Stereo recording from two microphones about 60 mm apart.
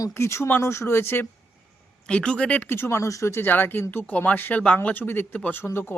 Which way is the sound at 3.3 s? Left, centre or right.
Left.